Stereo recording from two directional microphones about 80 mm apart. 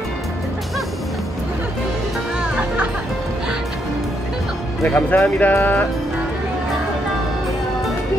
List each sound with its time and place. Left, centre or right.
4.8 s speech: centre